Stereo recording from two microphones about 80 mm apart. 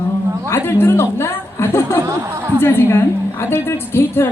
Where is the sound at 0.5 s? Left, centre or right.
Left.